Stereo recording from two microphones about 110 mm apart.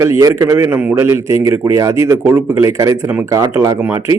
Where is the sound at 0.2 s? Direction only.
30° right (ahead or behind).